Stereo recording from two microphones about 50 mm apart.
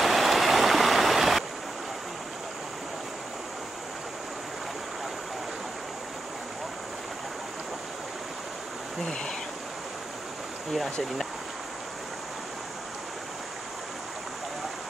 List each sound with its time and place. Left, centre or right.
0.0 s stream: centre
10.7 s speech: centre